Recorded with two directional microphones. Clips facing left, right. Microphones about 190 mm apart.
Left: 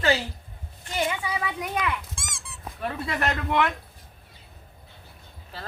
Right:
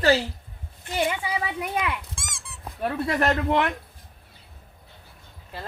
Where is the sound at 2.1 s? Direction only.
Centre (ahead or behind).